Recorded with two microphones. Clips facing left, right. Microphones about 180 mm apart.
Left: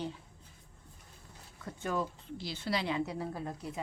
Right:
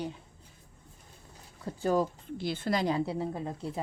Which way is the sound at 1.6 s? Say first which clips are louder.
Right 7 dB; 35° right (ahead or behind).